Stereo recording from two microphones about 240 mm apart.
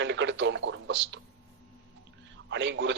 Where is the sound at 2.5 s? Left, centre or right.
Right.